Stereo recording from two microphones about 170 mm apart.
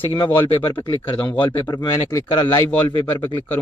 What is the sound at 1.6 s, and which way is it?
Speech, 20° left (ahead or behind).